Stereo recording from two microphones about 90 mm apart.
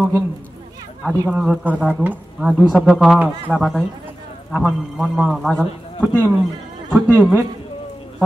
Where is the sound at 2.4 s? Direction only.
Centre (ahead or behind).